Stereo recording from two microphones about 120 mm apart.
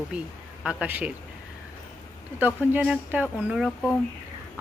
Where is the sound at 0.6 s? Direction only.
10° right (ahead or behind).